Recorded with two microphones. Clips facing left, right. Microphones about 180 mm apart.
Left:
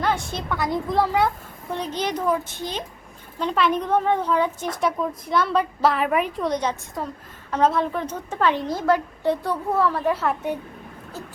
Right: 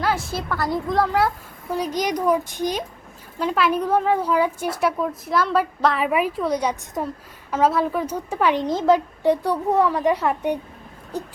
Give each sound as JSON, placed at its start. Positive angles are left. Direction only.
{"t": 0.0, "sound": "a woman's voice", "side_deg": -5}
{"t": 1.7, "sound": "a woman's voice", "side_deg": -10}
{"t": 3.3, "sound": "a woman's voice", "side_deg": -5}
{"t": 7.5, "sound": "a woman's voice", "side_deg": -5}